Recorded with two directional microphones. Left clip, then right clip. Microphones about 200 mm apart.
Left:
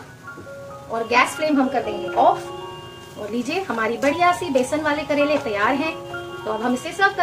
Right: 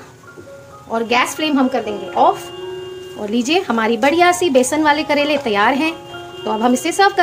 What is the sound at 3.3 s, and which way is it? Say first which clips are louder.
A woman's voice: right 8 dB; 45° right (ahead or behind).